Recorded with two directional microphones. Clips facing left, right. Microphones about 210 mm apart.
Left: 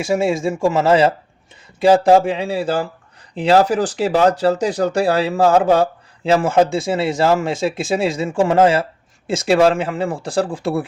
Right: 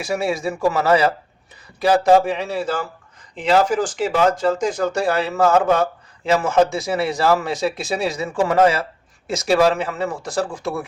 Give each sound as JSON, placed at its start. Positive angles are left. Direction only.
{"t": 0.0, "sound": "speech", "side_deg": 25}